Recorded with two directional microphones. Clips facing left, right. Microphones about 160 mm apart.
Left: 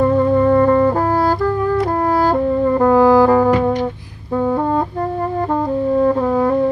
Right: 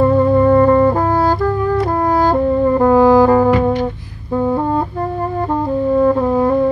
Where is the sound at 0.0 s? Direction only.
10° right (ahead or behind).